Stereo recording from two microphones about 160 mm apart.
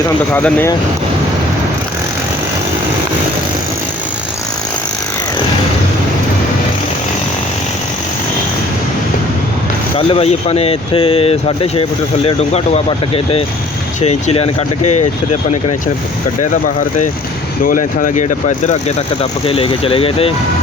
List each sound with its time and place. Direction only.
0.3 s speech: 10° left (ahead or behind)
10.1 s speech: 35° left (ahead or behind)
17.6 s speech: 60° left (ahead or behind); by 20.3 s 35° left (ahead or behind)